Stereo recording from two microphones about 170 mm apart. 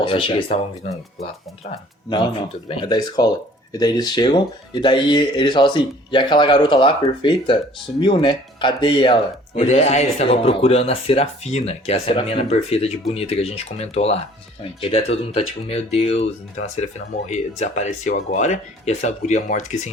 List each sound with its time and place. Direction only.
0.0 s speech: 30° left (ahead or behind)
2.0 s speech: 30° left (ahead or behind); by 19.9 s 45° left (ahead or behind)